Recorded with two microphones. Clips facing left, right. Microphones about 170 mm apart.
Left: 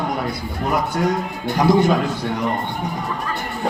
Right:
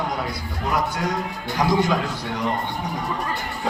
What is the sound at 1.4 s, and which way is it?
Speech, 55° left (ahead or behind).